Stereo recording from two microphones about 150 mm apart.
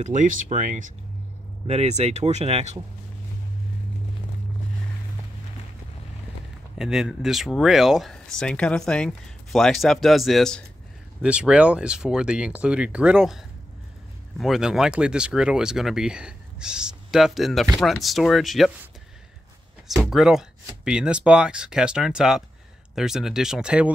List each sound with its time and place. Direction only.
0.0 s speech: 55° right (ahead or behind)
1.7 s speech: 45° right (ahead or behind)
6.8 s speech: 5° right (ahead or behind)
14.4 s speech: centre (ahead or behind)
19.9 s speech: centre (ahead or behind)